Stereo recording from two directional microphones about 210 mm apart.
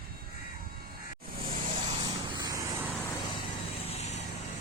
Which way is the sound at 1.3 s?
45° right (ahead or behind).